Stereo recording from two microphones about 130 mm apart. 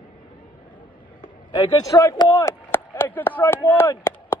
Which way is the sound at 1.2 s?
40° left (ahead or behind).